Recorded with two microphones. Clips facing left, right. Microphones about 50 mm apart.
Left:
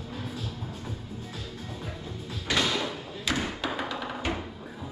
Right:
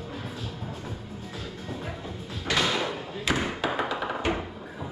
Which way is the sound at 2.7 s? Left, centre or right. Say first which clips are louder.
Right 2 dB; centre.